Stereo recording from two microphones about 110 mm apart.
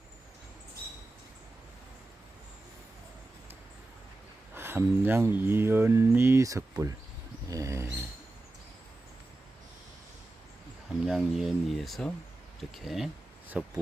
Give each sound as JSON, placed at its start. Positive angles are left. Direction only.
{"t": 4.5, "sound": "mantra", "side_deg": -20}
{"t": 7.5, "sound": "dog", "side_deg": -30}
{"t": 11.0, "sound": "speech", "side_deg": -5}
{"t": 13.5, "sound": "speech", "side_deg": -15}